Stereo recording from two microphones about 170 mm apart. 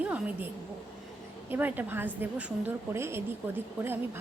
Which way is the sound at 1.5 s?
10° right (ahead or behind).